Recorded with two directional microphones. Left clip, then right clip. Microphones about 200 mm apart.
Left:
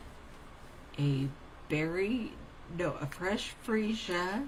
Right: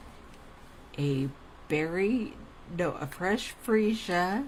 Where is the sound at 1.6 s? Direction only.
50° right (ahead or behind).